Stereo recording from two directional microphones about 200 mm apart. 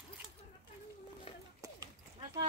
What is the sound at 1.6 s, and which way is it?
Clip-clop, 15° right (ahead or behind).